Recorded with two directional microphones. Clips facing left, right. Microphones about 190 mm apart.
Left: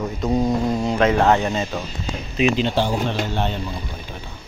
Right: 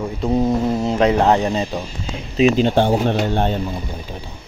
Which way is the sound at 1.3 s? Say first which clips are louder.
Right 3 dB; 35° right (ahead or behind).